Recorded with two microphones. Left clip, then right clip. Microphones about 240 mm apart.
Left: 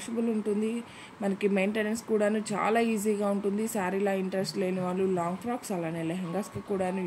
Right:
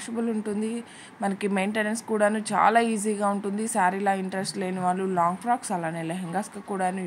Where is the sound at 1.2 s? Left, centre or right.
Centre.